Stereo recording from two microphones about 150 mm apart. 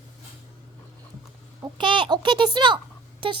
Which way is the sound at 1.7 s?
30° right (ahead or behind).